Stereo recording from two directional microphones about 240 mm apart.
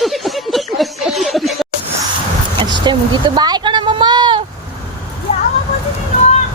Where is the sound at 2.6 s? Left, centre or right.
Centre.